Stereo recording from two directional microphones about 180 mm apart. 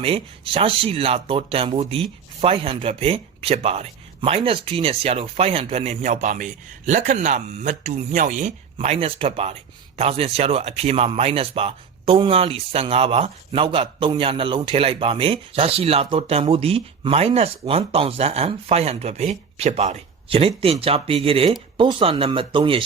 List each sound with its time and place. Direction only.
0.0 s speech: 30° right (ahead or behind)